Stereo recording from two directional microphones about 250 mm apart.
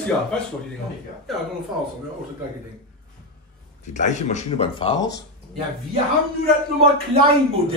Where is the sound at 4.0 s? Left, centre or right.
Left.